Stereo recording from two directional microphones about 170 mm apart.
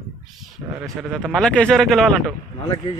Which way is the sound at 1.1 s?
Centre (ahead or behind).